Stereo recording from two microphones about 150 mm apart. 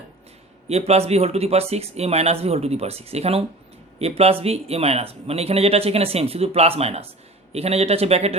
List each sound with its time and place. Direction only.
0.7 s speech: 45° right (ahead or behind)